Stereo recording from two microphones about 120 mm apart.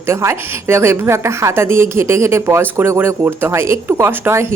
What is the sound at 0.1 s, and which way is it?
A woman's voice, 20° right (ahead or behind).